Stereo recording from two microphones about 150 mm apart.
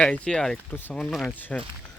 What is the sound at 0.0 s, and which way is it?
Speech, 5° left (ahead or behind).